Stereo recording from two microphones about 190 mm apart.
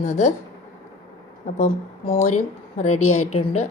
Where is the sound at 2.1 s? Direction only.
40° left (ahead or behind).